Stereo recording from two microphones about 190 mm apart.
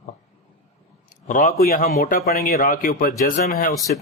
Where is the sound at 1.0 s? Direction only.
45° left (ahead or behind).